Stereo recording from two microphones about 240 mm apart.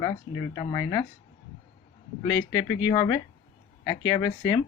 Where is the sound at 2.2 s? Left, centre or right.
Centre.